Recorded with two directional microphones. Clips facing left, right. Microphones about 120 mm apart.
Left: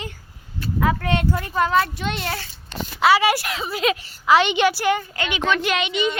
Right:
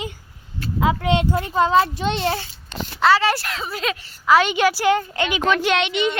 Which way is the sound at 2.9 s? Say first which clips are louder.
Even; 10° left (ahead or behind).